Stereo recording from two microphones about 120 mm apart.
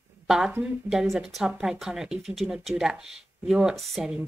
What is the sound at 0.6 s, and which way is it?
Speech, 5° right (ahead or behind).